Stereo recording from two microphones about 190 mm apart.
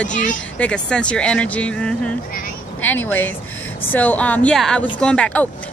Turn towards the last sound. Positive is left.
turn(degrees=5)  # may be behind; listen again after turning